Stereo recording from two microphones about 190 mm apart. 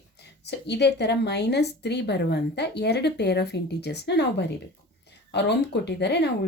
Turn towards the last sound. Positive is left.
turn(degrees=65)  # may be behind; listen again after turning